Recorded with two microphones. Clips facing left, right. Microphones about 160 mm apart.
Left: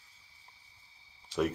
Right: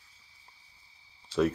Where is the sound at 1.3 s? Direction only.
15° left (ahead or behind).